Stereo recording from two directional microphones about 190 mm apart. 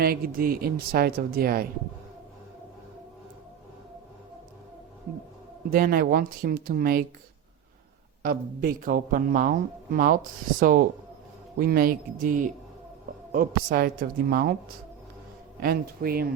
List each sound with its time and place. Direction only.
0.0 s speech: 50° right (ahead or behind)
5.7 s speech: 50° right (ahead or behind)
8.2 s speech: 50° right (ahead or behind)
15.6 s speech: 50° right (ahead or behind)